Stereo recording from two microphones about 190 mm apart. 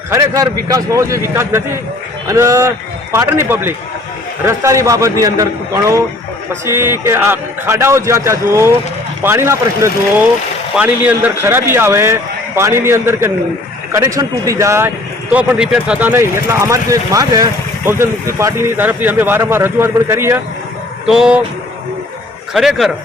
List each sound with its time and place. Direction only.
0.1 s speech: 15° right (ahead or behind)
22.5 s speech: centre (ahead or behind)